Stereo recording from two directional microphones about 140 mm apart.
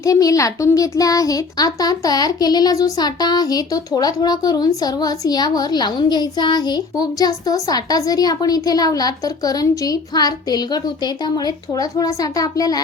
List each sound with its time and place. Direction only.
0.0 s speech: 25° left (ahead or behind)